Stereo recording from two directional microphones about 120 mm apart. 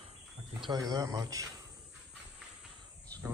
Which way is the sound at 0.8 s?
30° right (ahead or behind).